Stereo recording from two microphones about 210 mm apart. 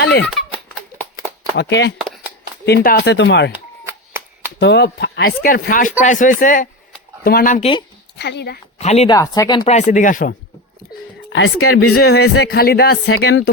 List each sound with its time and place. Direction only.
0.0 s speech: 55° left (ahead or behind)
1.5 s speech: 55° left (ahead or behind)
3.5 s a sound: 10° right (ahead or behind)
4.6 s speech: 55° left (ahead or behind); by 7.7 s 40° left (ahead or behind)
8.2 s speech: 55° left (ahead or behind)
8.8 s speech: 30° left (ahead or behind)
9.0 s speech: 15° left (ahead or behind)
9.6 s speech: 35° left (ahead or behind)
11.3 s speech: 65° left (ahead or behind)
11.9 s speech: 50° left (ahead or behind)